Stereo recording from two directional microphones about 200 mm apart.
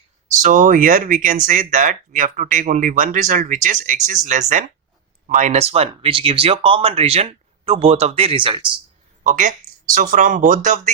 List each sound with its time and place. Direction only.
0.4 s speech: 40° right (ahead or behind); by 8.6 s 25° right (ahead or behind)
9.2 s speech: 40° right (ahead or behind)